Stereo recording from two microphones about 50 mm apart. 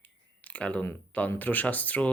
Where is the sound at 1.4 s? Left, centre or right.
Left.